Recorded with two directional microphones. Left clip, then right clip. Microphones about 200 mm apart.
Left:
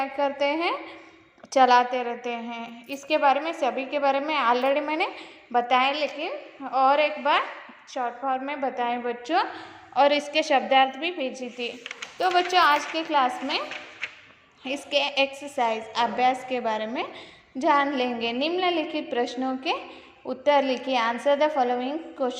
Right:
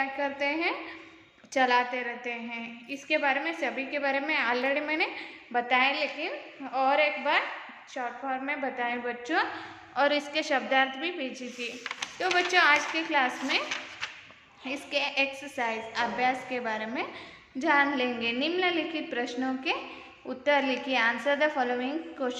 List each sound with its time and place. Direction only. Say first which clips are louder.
0.0 s a woman's voice: left 5 dB; 25° left (ahead or behind)
14.6 s a woman's voice: left 5 dB; 25° left (ahead or behind)